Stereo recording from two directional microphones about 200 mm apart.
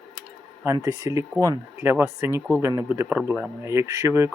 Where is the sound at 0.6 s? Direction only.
15° right (ahead or behind).